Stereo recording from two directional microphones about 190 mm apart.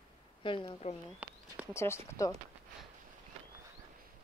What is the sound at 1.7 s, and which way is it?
Speech, 15° left (ahead or behind).